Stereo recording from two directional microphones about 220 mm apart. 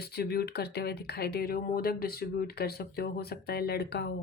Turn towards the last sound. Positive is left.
turn(degrees=45)  # may be behind; listen again after turning